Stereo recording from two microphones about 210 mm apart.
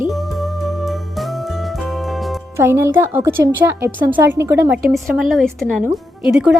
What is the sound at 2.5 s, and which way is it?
A woman's voice, 10° right (ahead or behind).